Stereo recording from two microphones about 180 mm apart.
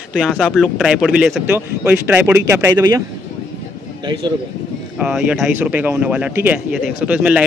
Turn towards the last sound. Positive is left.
turn(degrees=-5)  # may be behind; listen again after turning